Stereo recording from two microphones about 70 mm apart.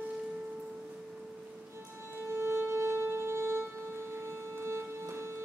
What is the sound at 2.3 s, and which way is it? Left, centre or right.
Violin, right.